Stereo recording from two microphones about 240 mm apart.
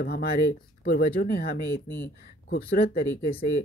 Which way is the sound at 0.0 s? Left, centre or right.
Left.